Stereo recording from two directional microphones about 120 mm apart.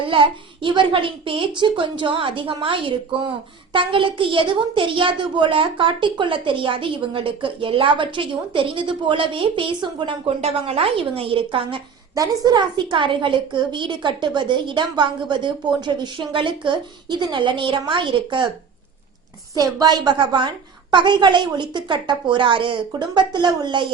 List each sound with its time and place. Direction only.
0.1 s a woman's voice: 45° right (ahead or behind)
10.4 s a woman's voice: 55° right (ahead or behind)
12.1 s a woman's voice: 30° right (ahead or behind)
19.5 s a woman's voice: 30° right (ahead or behind)